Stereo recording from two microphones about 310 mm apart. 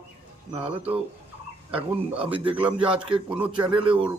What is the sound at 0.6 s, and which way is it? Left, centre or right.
Speech, centre.